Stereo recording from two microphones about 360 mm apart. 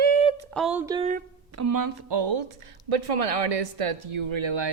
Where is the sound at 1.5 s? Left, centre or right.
Right.